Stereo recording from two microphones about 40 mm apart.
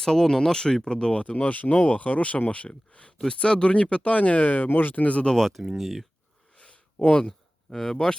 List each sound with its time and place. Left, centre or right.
0.0 s speech: centre; by 5.0 s left
5.2 s speech: centre
5.6 s speech: centre
6.6 s a sound: left
7.2 s speech: centre